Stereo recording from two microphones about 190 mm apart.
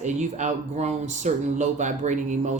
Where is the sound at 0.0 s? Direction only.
40° right (ahead or behind).